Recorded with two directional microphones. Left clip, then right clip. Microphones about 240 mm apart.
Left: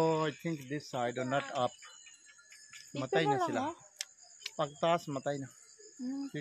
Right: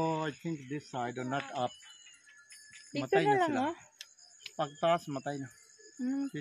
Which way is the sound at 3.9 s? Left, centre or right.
Left.